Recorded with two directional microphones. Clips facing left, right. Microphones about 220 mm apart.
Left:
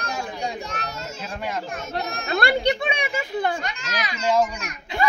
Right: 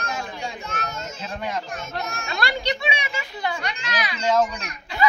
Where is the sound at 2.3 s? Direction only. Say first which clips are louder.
Left 6 dB; 55° left (ahead or behind).